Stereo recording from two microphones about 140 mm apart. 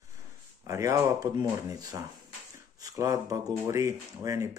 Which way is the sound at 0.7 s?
25° right (ahead or behind).